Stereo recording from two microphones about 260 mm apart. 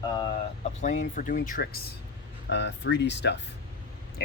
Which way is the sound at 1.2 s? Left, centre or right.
Left.